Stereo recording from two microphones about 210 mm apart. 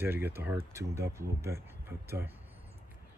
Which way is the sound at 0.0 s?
10° right (ahead or behind).